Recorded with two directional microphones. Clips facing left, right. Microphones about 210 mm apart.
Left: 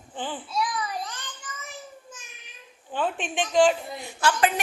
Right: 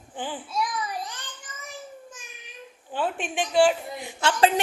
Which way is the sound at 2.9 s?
10° right (ahead or behind).